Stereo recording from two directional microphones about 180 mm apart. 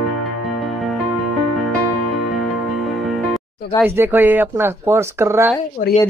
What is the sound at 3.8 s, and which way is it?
Speech, 10° right (ahead or behind).